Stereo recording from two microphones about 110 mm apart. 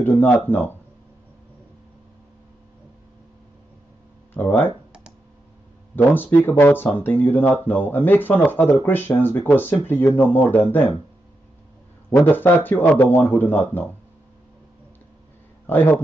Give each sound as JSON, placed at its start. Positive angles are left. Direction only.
{"t": 0.0, "sound": "speech", "side_deg": 20}
{"t": 4.3, "sound": "speech", "side_deg": 15}
{"t": 5.9, "sound": "speech", "side_deg": 20}
{"t": 12.3, "sound": "speech", "side_deg": 20}
{"t": 15.6, "sound": "speech", "side_deg": 20}